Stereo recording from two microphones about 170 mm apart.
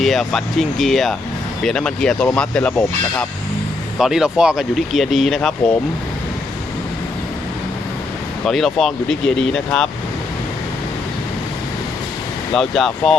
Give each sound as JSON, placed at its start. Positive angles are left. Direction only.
{"t": 0.0, "sound": "speech", "side_deg": 0}
{"t": 8.4, "sound": "speech", "side_deg": 0}
{"t": 12.5, "sound": "speech", "side_deg": 0}